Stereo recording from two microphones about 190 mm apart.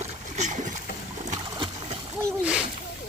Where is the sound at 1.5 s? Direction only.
25° right (ahead or behind).